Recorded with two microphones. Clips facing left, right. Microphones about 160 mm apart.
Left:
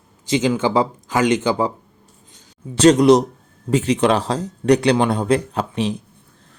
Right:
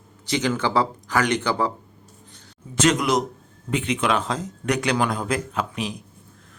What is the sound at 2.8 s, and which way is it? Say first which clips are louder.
A man's voice: left 9 dB; 35° left (ahead or behind).